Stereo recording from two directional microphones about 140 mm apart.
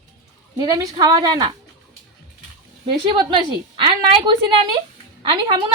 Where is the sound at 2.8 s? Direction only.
35° right (ahead or behind).